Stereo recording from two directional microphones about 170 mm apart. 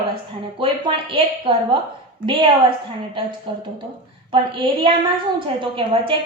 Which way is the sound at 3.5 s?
30° right (ahead or behind).